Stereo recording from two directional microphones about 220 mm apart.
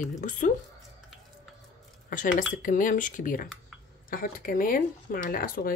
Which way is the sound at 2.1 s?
35° left (ahead or behind).